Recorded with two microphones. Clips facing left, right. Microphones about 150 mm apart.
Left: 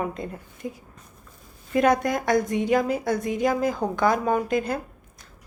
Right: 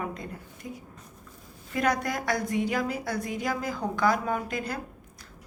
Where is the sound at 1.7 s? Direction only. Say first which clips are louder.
Left 7 dB; 25° left (ahead or behind).